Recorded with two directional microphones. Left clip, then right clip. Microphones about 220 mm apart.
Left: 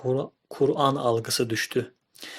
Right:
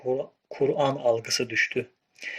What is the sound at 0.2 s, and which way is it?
Speech, 50° left (ahead or behind).